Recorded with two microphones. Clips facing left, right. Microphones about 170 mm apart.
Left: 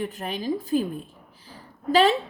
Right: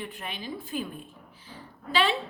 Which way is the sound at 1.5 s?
40° left (ahead or behind).